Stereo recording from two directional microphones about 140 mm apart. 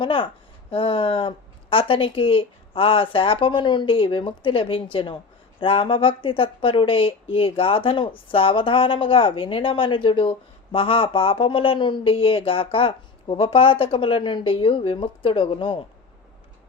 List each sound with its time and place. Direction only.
0.0 s speech: 35° left (ahead or behind)